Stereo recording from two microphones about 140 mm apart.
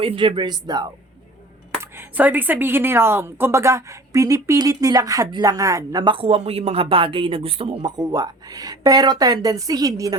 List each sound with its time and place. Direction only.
0.0 s speech: 35° right (ahead or behind)
1.8 s speech: 15° right (ahead or behind); by 7.9 s 45° right (ahead or behind)
7.9 s speech: 25° right (ahead or behind)